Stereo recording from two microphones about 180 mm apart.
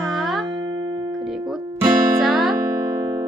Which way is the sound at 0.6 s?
20° right (ahead or behind).